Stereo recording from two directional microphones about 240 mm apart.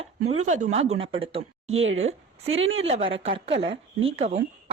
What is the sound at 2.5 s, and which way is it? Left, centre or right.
Speech, right.